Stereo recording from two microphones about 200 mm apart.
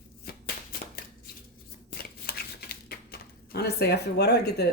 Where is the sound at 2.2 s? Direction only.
50° left (ahead or behind).